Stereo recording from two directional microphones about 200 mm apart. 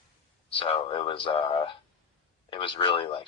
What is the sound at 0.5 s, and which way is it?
Speech, 25° left (ahead or behind).